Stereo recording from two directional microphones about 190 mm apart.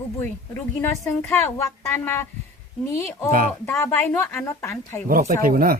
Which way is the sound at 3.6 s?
15° left (ahead or behind).